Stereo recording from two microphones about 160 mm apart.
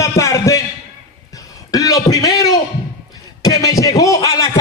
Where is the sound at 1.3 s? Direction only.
20° left (ahead or behind).